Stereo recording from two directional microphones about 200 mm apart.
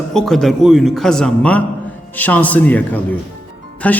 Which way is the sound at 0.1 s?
Centre (ahead or behind).